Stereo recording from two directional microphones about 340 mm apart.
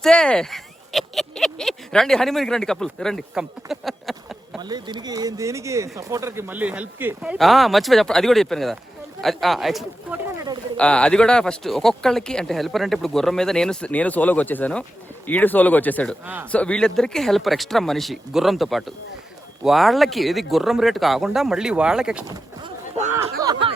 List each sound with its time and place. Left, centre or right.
0.0 s speech: centre
4.6 s speech: centre
22.6 s a sound: centre
23.4 s snicker: centre